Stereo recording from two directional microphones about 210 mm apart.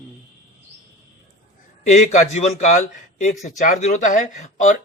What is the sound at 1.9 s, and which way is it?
A man's voice, 35° left (ahead or behind).